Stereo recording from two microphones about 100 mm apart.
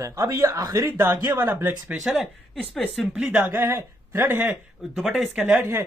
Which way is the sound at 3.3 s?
20° right (ahead or behind).